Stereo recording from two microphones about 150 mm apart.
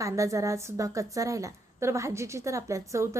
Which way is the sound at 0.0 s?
20° right (ahead or behind).